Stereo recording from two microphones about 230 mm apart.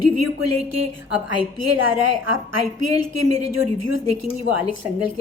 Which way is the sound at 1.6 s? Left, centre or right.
Right.